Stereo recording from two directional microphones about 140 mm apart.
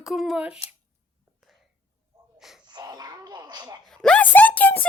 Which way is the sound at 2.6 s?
30° right (ahead or behind).